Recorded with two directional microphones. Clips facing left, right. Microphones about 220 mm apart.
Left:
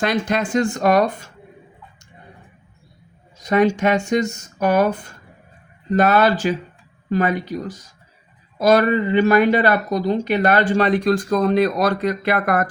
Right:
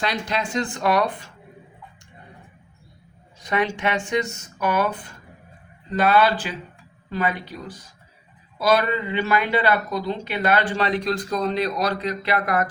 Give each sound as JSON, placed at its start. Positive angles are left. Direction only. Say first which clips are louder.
{"t": 0.0, "sound": "speech", "louder": "left 6 dB", "side_deg": 50}
{"t": 3.3, "sound": "speech", "louder": "left 8 dB", "side_deg": 40}